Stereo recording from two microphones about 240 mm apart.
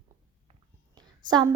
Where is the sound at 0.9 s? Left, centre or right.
Centre.